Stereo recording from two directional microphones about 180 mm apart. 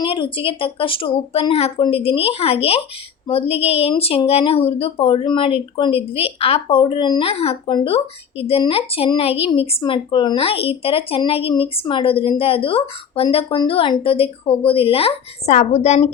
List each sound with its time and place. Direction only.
0.0 s speech: 30° left (ahead or behind)